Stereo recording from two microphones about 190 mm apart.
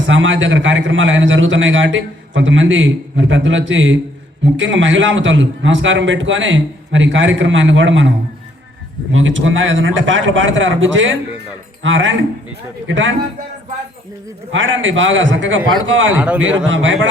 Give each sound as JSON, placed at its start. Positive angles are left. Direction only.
{"t": 0.1, "sound": "a man's voice", "side_deg": -90}
{"t": 9.1, "sound": "a man's voice", "side_deg": -85}
{"t": 14.5, "sound": "a man's voice", "side_deg": -85}
{"t": 16.1, "sound": "a man's voice", "side_deg": -5}
{"t": 16.6, "sound": "a man's voice", "side_deg": -80}